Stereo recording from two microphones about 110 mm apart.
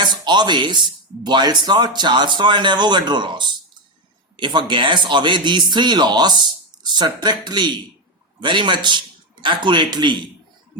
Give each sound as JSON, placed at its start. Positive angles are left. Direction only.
{"t": 0.0, "sound": "a man's voice", "side_deg": -40}